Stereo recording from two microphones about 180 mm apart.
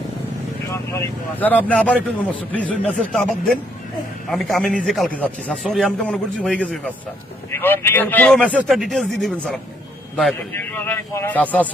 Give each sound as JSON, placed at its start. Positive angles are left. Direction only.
{"t": 0.7, "sound": "a man's voice", "side_deg": 15}
{"t": 10.3, "sound": "a man's voice", "side_deg": 10}